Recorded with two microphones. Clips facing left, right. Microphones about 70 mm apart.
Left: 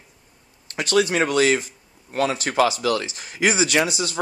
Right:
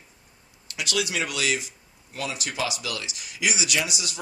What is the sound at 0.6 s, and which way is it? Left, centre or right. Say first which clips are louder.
Speech: left 9 dB; left.